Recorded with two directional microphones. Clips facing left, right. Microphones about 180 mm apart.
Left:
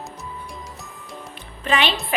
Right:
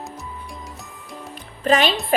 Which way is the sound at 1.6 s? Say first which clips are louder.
Right 4 dB; 40° right (ahead or behind).